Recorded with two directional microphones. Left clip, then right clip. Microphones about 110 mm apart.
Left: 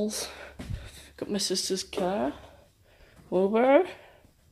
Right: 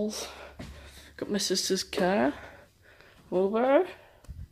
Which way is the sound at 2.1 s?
30° right (ahead or behind).